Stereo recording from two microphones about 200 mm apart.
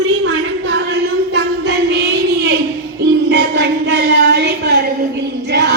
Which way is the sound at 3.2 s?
55° right (ahead or behind).